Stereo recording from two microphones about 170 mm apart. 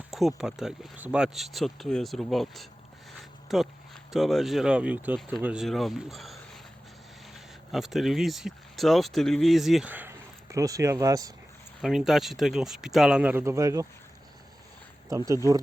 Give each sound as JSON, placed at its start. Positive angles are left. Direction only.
{"t": 0.1, "sound": "speech", "side_deg": 0}
{"t": 11.8, "sound": "speech", "side_deg": 0}
{"t": 15.1, "sound": "speech", "side_deg": -20}